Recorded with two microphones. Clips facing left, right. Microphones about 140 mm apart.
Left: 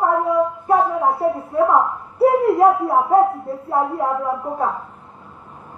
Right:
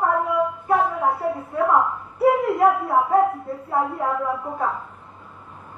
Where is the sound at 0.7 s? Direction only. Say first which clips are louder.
Left 3 dB; 15° left (ahead or behind); by 3.3 s 30° left (ahead or behind).